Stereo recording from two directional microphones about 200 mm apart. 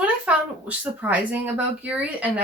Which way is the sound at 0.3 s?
5° right (ahead or behind).